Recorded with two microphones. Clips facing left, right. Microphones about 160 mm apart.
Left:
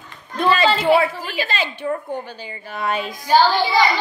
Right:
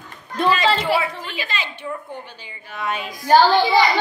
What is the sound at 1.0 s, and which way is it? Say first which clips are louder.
A woman's voice: left 5 dB; 35° left (ahead or behind).